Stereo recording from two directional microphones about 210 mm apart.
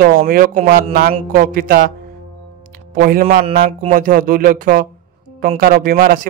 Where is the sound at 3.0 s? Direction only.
45° right (ahead or behind).